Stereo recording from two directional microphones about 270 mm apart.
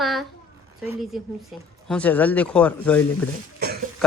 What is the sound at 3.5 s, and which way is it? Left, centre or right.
Cough, right.